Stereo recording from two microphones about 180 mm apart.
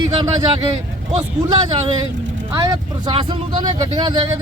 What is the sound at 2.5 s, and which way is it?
Speech, 20° right (ahead or behind).